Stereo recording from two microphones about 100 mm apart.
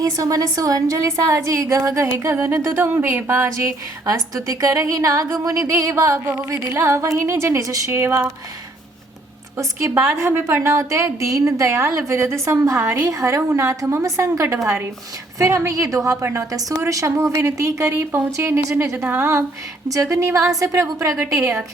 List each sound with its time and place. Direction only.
0.0 s a woman's voice: 35° right (ahead or behind)
9.6 s a woman's voice: 25° right (ahead or behind)